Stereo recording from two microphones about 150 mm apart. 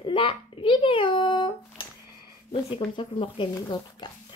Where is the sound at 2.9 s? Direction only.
35° left (ahead or behind).